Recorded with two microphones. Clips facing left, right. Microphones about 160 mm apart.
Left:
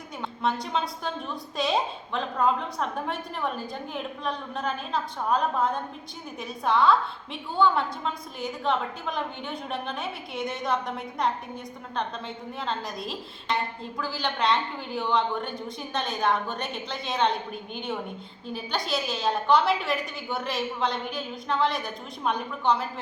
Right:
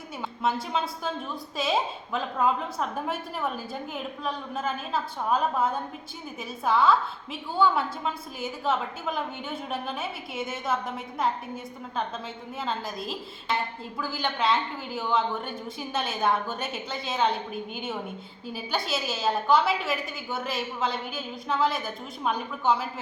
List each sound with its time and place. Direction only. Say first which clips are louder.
0.2 s a woman's voice: even; 5° right (ahead or behind)
12.5 s a woman's voice: right 1 dB; centre (ahead or behind)